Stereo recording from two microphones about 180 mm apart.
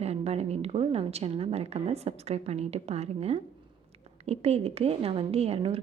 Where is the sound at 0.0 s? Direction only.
35° right (ahead or behind).